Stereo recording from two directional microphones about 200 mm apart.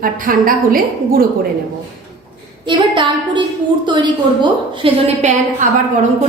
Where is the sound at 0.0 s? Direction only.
45° right (ahead or behind).